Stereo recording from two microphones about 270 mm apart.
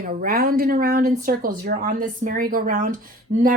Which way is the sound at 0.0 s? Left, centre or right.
Right.